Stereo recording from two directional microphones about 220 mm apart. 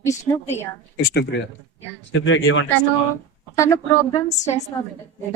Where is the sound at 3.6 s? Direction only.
15° left (ahead or behind).